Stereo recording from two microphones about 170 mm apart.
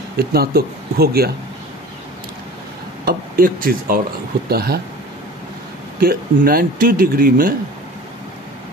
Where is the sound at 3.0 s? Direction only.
60° right (ahead or behind).